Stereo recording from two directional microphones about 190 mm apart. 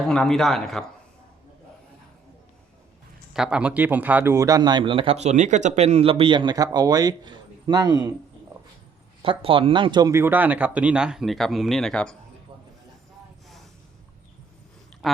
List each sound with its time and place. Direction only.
0.0 s speech: 5° left (ahead or behind)
3.3 s speech: 5° right (ahead or behind); by 8.1 s 20° right (ahead or behind)
9.2 s speech: 30° right (ahead or behind); by 12.1 s 5° left (ahead or behind)
15.0 s speech: centre (ahead or behind)